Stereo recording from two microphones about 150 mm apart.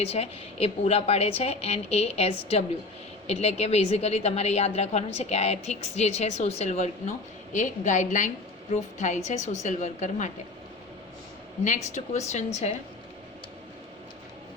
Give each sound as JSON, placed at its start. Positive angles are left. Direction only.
{"t": 0.0, "sound": "a woman's voice", "side_deg": 40}
{"t": 11.6, "sound": "a woman's voice", "side_deg": 55}